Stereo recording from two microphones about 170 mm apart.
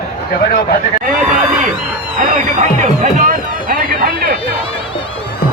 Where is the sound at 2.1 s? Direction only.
50° right (ahead or behind).